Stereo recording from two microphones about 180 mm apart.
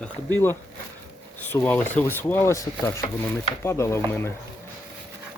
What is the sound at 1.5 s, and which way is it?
Speech, 10° left (ahead or behind).